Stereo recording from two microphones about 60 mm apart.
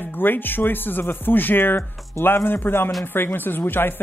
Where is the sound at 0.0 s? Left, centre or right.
Left.